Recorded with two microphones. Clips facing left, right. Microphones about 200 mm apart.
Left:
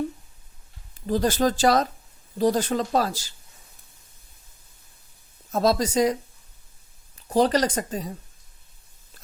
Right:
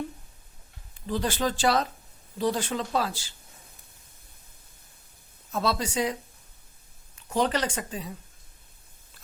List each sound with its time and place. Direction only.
1.0 s speech: 40° left (ahead or behind)
5.5 s speech: 40° left (ahead or behind)
7.2 s speech: 35° left (ahead or behind)